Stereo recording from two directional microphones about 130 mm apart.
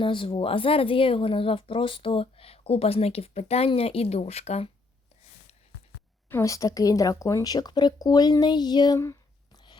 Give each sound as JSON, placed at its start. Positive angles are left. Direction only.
{"t": 0.0, "sound": "speech", "side_deg": 40}
{"t": 6.2, "sound": "speech", "side_deg": 20}
{"t": 9.0, "sound": "a sound", "side_deg": 25}